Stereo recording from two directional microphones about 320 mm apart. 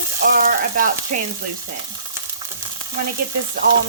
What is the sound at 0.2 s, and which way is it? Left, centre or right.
Speech, right.